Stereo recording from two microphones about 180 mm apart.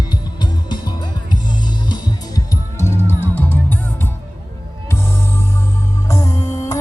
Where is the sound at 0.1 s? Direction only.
25° left (ahead or behind).